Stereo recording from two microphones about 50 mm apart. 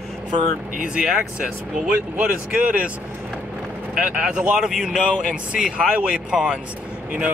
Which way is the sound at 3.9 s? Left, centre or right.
Right.